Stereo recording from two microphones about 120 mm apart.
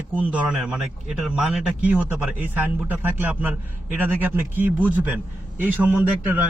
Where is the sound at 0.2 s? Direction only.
10° right (ahead or behind).